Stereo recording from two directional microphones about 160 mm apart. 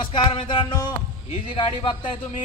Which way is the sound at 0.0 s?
30° left (ahead or behind).